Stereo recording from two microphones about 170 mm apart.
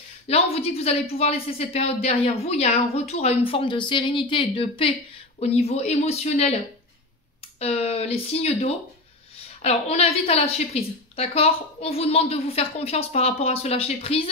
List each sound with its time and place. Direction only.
0.3 s a woman's voice: 35° left (ahead or behind)
7.5 s a woman's voice: 40° left (ahead or behind)